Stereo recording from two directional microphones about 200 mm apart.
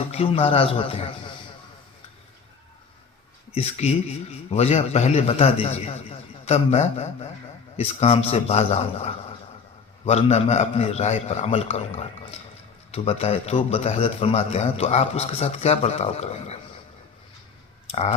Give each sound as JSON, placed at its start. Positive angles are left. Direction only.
{"t": 0.1, "sound": "a man's voice", "side_deg": 30}
{"t": 3.5, "sound": "a man's voice", "side_deg": 30}